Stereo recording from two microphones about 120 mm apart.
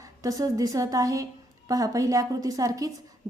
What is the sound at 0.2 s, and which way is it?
A woman's voice, 30° right (ahead or behind).